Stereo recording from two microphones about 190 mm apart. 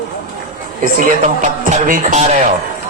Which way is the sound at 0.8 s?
45° right (ahead or behind).